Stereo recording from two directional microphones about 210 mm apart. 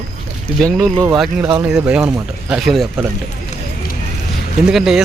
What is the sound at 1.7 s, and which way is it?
Speech, 5° right (ahead or behind).